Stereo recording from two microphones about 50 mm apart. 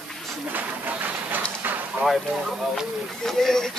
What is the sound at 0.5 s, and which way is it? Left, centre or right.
Train, right.